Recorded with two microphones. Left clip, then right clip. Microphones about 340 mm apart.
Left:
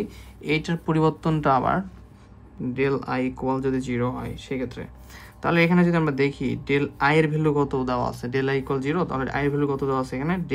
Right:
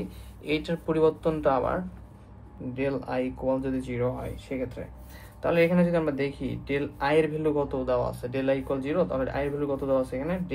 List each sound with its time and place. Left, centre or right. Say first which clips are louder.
0.4 s speech: left 3 dB; left